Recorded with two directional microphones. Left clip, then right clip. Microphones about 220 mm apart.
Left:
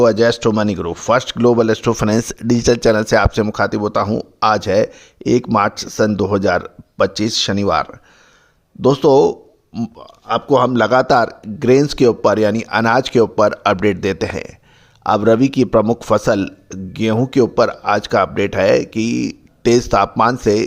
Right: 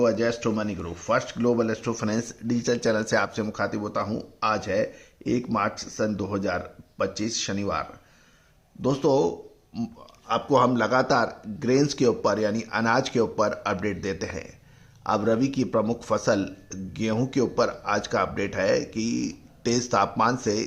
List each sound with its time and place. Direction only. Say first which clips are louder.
0.0 s a man's voice: left 11 dB; 50° left (ahead or behind)